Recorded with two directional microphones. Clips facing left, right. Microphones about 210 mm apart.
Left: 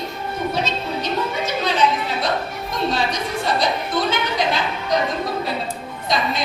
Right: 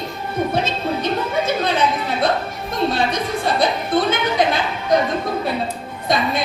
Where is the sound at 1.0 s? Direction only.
55° right (ahead or behind).